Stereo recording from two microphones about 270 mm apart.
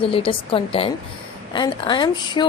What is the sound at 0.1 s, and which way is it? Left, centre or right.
A woman's voice, centre.